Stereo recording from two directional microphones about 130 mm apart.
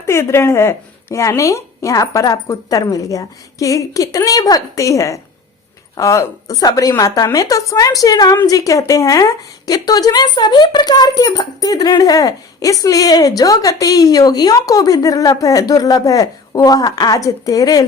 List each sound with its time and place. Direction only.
0.0 s speech: 20° left (ahead or behind)